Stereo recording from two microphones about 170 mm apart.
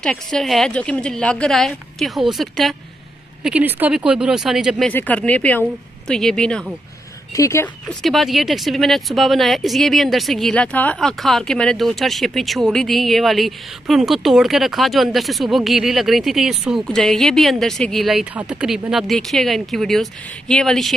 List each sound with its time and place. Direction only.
0.0 s speech: 5° left (ahead or behind)
7.3 s speech: 15° left (ahead or behind)
7.9 s speech: centre (ahead or behind)